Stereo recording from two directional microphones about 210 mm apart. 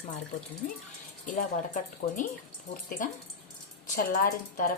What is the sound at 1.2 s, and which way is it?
Speech, 40° left (ahead or behind).